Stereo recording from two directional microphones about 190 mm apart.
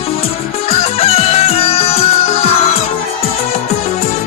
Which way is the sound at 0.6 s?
35° left (ahead or behind).